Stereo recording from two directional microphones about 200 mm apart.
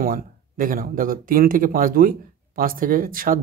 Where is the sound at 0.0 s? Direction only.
45° right (ahead or behind).